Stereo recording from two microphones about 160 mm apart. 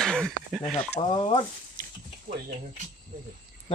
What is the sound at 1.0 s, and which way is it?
Speech, 30° left (ahead or behind).